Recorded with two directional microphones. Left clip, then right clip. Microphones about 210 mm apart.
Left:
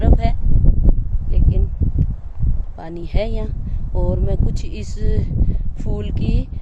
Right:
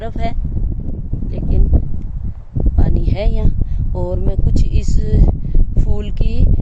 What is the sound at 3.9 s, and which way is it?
Speech, 20° right (ahead or behind).